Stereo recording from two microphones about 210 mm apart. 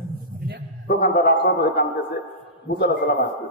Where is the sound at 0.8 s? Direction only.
45° left (ahead or behind).